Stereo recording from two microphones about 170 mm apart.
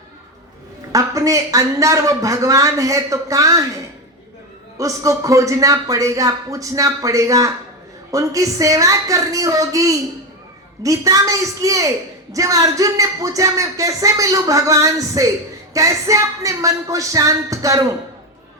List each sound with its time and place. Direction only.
0.9 s speech: 20° right (ahead or behind)
4.8 s speech: 20° right (ahead or behind)